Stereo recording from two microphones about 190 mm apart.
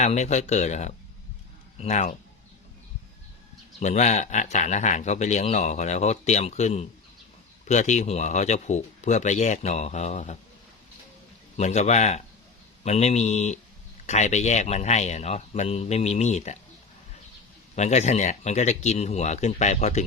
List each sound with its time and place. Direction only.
0.0 s speech: 35° left (ahead or behind)
3.8 s speech: 40° left (ahead or behind)
11.5 s speech: 35° left (ahead or behind)
17.7 s speech: 35° left (ahead or behind)